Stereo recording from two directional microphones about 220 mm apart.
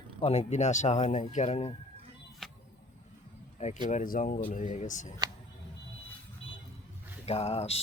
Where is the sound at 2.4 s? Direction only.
Centre (ahead or behind).